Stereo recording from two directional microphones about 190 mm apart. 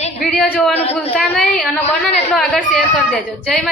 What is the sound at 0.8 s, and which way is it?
Speech, 35° left (ahead or behind).